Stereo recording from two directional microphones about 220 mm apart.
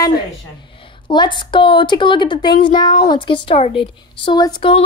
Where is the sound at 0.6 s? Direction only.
25° left (ahead or behind).